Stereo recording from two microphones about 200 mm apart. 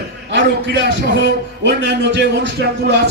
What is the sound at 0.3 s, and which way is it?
Speech, 60° right (ahead or behind).